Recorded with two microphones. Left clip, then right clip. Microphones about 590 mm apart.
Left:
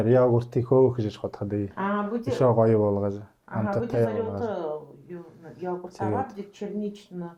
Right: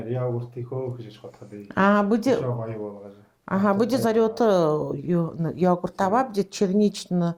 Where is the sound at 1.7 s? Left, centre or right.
Right.